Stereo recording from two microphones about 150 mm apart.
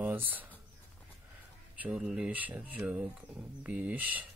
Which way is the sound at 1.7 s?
10° right (ahead or behind).